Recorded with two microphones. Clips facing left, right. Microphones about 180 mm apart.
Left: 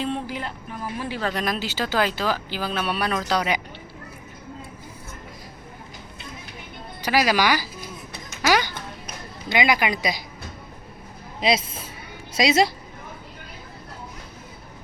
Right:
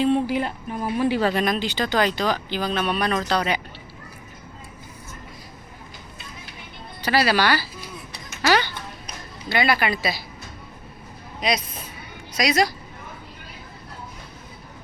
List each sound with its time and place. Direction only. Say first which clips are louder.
0.3 s a woman's voice: right 7 dB; 15° right (ahead or behind)
1.4 s speech: right 3 dB; 5° left (ahead or behind)
7.0 s speech: even; 10° left (ahead or behind)
8.4 s music: right 1 dB; 10° left (ahead or behind)
9.5 s speech: even; 15° left (ahead or behind)
11.3 s speech: left 3 dB; 25° left (ahead or behind)